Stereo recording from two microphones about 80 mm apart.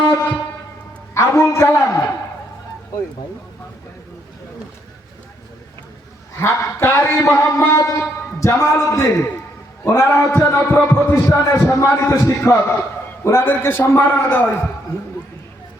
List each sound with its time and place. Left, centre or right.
1.1 s a man's voice: left
6.3 s a man's voice: left
11.1 s a man's voice: left